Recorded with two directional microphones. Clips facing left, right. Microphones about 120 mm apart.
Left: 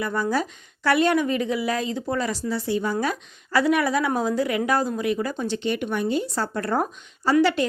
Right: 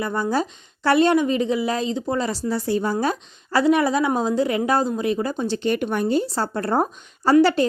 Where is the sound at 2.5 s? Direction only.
40° right (ahead or behind).